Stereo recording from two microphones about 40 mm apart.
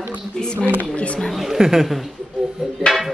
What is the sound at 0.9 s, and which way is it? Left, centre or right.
Speech, left.